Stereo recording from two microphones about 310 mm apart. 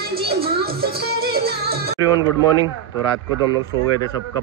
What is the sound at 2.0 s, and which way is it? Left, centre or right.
Speech, centre.